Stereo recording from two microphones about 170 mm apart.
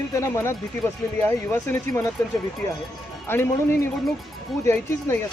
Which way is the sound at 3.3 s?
15° left (ahead or behind).